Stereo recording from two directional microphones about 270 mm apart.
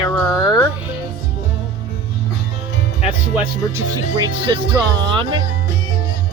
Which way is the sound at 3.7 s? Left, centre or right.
Centre.